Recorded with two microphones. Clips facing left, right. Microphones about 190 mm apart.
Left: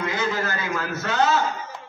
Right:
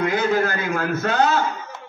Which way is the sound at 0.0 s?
55° right (ahead or behind).